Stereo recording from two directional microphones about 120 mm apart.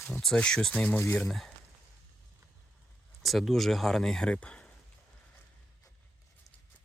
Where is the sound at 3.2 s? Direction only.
Centre (ahead or behind).